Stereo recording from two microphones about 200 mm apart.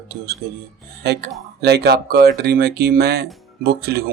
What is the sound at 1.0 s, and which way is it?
Speech, 55° right (ahead or behind).